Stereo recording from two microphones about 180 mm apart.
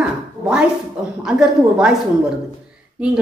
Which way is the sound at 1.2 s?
5° right (ahead or behind).